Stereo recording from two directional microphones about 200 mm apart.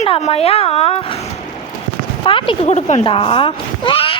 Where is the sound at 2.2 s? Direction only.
25° left (ahead or behind).